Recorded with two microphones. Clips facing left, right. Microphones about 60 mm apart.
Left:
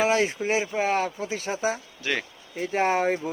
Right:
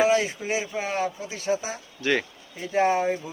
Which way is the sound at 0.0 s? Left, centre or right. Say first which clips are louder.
Right 1 dB; left.